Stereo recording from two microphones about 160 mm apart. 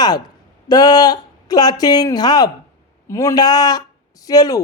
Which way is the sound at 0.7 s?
25° left (ahead or behind).